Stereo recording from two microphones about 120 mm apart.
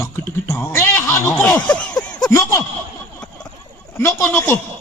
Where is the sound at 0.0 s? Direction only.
30° left (ahead or behind).